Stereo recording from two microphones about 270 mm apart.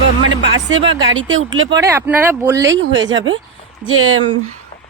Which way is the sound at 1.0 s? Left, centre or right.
Right.